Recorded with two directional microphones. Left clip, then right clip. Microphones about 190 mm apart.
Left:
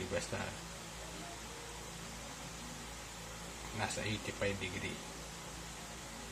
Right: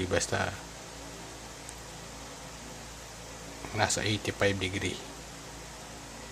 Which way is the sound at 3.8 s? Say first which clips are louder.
Right 10 dB; 50° right (ahead or behind).